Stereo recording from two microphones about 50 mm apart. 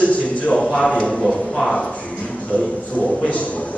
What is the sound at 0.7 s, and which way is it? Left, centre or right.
Speech, left.